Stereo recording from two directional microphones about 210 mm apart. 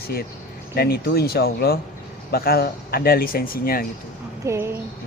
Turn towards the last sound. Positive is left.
turn(degrees=-10)  # may be behind; listen again after turning